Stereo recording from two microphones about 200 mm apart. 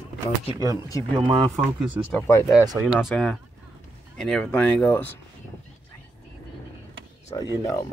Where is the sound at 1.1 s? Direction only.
25° right (ahead or behind).